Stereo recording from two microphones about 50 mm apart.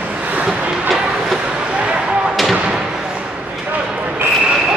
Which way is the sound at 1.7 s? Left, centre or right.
Right.